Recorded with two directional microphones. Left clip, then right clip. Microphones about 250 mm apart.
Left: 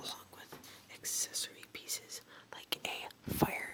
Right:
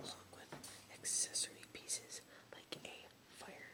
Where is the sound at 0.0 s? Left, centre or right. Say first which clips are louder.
Left 6 dB; centre.